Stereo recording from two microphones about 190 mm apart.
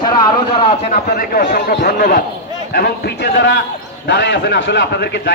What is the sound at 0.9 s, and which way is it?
A man's voice, 50° left (ahead or behind).